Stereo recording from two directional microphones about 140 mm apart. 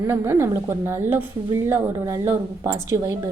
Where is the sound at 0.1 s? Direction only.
20° right (ahead or behind).